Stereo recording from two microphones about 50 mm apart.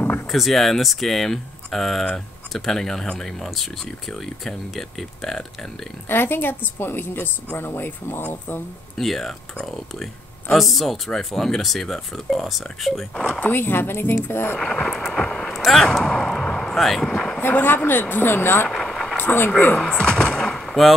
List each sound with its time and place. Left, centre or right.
0.3 s speech: centre
6.0 s a woman's voice: left
8.9 s speech: centre
13.1 s speech: centre
13.4 s a woman's voice: left
14.6 s speech: centre
15.1 s a sound: centre
15.5 s speech: centre
17.4 s a woman's voice: left
18.7 s vehicle: centre
19.1 s speech: left
20.0 s a sound: centre